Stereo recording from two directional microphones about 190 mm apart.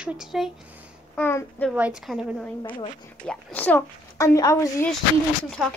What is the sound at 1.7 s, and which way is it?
A woman's voice, 5° right (ahead or behind).